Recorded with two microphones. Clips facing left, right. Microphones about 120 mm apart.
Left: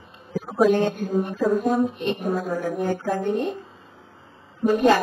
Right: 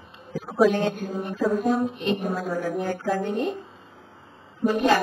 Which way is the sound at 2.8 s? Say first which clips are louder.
Left 2 dB; 20° left (ahead or behind).